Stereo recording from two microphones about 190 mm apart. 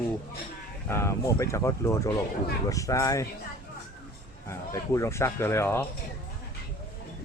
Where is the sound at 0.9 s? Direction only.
15° left (ahead or behind).